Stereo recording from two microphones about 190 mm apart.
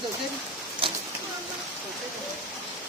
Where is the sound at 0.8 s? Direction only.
30° right (ahead or behind).